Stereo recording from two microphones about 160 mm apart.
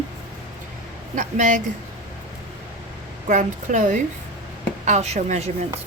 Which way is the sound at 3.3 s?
50° right (ahead or behind).